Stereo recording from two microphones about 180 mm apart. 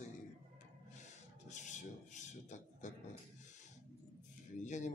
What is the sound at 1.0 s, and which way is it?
Rub, 40° left (ahead or behind).